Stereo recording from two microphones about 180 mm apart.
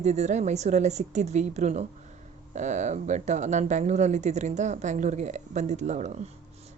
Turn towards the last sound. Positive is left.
turn(degrees=-40)  # may be behind; listen again after turning